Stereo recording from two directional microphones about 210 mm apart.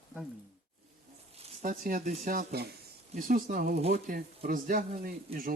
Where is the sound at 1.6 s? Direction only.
40° right (ahead or behind).